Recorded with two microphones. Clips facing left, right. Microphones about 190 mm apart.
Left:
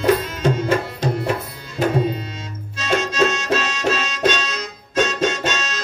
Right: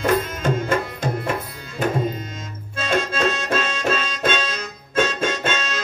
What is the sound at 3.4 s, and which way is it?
Music, 50° right (ahead or behind).